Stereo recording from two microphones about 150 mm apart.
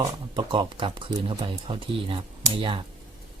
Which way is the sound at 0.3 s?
30° right (ahead or behind).